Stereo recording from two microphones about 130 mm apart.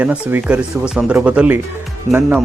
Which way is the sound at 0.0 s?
15° right (ahead or behind).